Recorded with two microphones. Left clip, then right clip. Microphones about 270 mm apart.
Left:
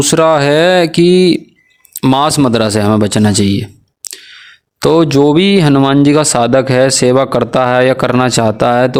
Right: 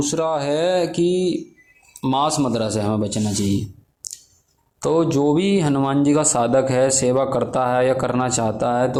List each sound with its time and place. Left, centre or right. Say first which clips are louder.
0.0 s speech: left 12 dB; left
4.8 s speech: left 10 dB; left